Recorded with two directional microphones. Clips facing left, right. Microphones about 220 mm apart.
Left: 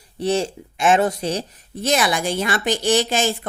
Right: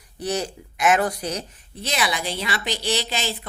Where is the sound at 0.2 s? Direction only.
25° left (ahead or behind).